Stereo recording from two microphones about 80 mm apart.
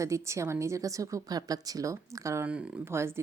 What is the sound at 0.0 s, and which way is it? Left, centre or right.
A woman's voice, right.